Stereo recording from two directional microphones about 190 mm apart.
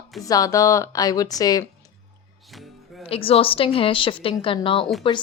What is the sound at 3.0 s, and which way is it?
A woman's voice, 30° left (ahead or behind).